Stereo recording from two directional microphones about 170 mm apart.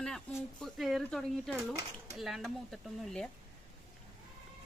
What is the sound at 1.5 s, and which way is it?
Speech, 20° right (ahead or behind).